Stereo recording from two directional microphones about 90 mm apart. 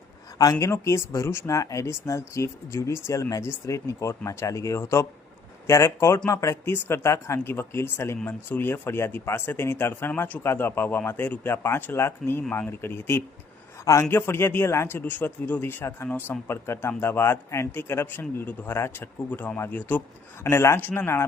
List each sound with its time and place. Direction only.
0.6 s speech: 30° left (ahead or behind)
12.5 s speech: 15° left (ahead or behind)
12.8 s speech: 25° left (ahead or behind)
13.8 s speech: 40° left (ahead or behind)
14.1 s speech: 25° left (ahead or behind)